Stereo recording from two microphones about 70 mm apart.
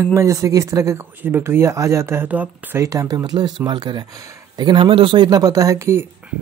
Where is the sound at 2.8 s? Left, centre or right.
Right.